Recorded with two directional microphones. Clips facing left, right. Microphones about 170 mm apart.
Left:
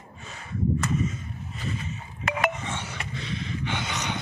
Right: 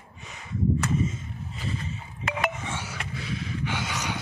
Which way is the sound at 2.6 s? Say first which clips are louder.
Even; 5° right (ahead or behind).